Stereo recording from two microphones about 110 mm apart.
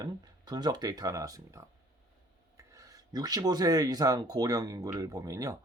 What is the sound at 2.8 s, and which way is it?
Speech, 35° right (ahead or behind).